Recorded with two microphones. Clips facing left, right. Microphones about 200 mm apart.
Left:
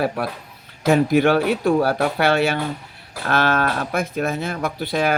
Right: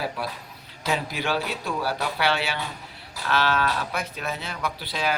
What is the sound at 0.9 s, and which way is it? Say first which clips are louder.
Speech: left 12 dB; 50° left (ahead or behind).